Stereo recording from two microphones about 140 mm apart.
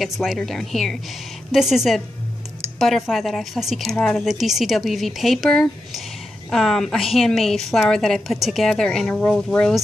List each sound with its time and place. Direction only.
0.0 s a woman's voice: centre (ahead or behind)